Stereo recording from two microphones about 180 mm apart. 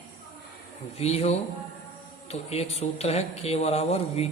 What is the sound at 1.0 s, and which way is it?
Speech, 35° left (ahead or behind).